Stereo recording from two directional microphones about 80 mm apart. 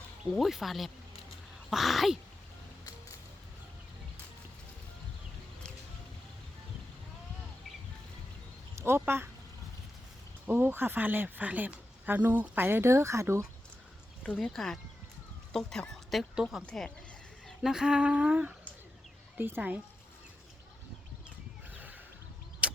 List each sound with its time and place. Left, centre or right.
0.3 s speech: centre
8.7 s a sound: right
9.0 s speech: right
10.4 s a woman's voice: right
14.4 s speech: centre
17.6 s humming: centre
19.4 s a woman's voice: right
21.2 s wild animals: right
22.6 s vehicle: centre